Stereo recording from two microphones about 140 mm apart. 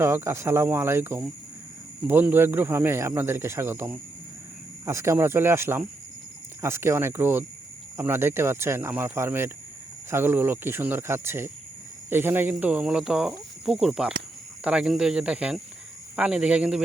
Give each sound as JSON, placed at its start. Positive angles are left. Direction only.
{"t": 0.0, "sound": "speech", "side_deg": -20}